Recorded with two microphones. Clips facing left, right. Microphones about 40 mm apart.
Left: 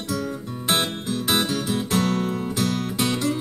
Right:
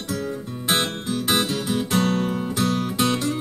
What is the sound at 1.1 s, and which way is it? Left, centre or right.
Music, centre.